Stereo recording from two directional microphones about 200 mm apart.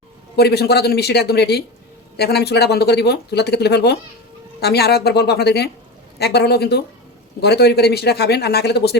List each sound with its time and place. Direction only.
0.3 s a woman's voice: 55° left (ahead or behind)